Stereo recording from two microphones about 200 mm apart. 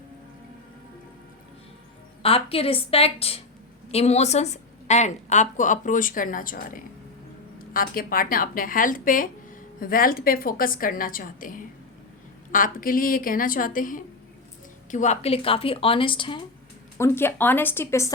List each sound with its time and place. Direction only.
2.2 s a woman's voice: 30° left (ahead or behind)
17.0 s speech: 10° left (ahead or behind)